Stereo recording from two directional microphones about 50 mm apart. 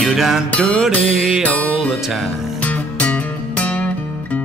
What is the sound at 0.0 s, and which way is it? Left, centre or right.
Music, centre.